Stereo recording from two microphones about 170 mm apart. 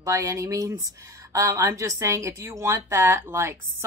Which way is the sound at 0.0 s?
20° right (ahead or behind).